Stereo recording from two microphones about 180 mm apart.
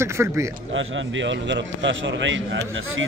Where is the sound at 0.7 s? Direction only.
90° right.